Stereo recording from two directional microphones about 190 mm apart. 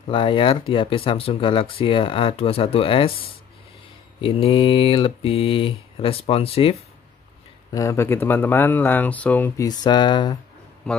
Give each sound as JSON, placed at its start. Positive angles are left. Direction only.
{"t": 0.1, "sound": "speech", "side_deg": 25}
{"t": 7.7, "sound": "speech", "side_deg": 15}
{"t": 9.7, "sound": "speech", "side_deg": 25}
{"t": 10.9, "sound": "speech", "side_deg": 5}